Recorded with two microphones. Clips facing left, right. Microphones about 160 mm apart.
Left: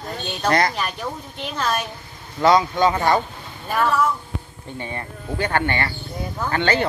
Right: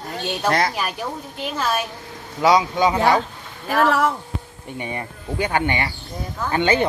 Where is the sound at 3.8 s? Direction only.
75° right (ahead or behind).